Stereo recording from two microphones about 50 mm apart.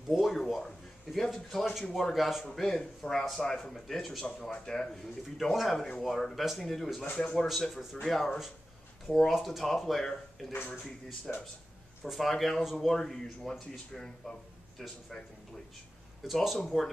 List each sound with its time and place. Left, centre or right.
0.1 s speech: centre
2.4 s speech: centre
7.1 s speech: left
7.7 s speech: centre
11.3 s speech: centre
12.0 s speech: centre
16.3 s speech: centre